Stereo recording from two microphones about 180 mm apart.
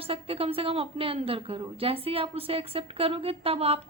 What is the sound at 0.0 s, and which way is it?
A woman's voice, 30° right (ahead or behind).